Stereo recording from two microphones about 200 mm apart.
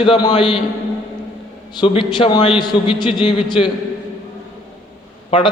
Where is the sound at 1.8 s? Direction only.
25° left (ahead or behind).